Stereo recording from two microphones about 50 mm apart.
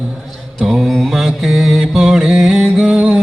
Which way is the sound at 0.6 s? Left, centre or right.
Centre.